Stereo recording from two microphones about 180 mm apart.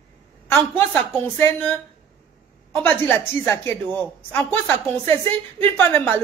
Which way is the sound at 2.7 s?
10° left (ahead or behind).